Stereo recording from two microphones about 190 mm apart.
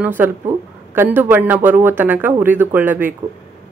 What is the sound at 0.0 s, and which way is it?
Speech, 10° right (ahead or behind).